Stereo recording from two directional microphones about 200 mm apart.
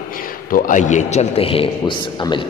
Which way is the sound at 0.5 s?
40° left (ahead or behind).